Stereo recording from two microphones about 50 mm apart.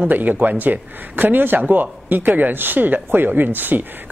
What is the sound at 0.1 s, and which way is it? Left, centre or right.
Speech, right.